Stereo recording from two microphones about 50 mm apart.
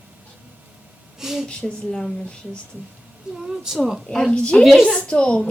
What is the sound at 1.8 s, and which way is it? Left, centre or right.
Speech, centre.